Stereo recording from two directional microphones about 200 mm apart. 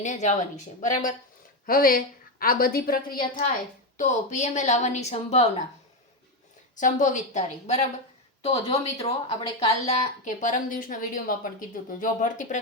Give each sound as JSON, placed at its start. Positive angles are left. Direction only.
{"t": 0.0, "sound": "a woman's voice", "side_deg": 35}
{"t": 3.9, "sound": "speech", "side_deg": 35}
{"t": 6.7, "sound": "speech", "side_deg": 40}